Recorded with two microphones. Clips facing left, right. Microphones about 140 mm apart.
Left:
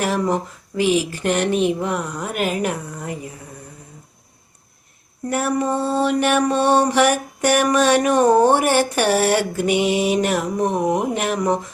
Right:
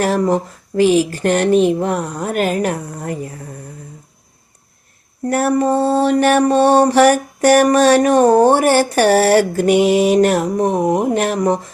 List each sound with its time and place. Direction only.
0.0 s mantra: 35° right (ahead or behind)
5.3 s mantra: 40° right (ahead or behind)